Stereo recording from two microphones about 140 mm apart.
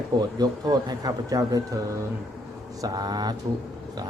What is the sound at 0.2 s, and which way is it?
Speech, 30° right (ahead or behind).